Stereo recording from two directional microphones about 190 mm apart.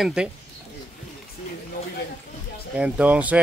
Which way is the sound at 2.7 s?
5° right (ahead or behind).